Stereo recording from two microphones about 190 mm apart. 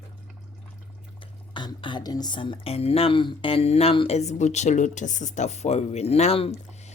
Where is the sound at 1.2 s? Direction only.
25° left (ahead or behind).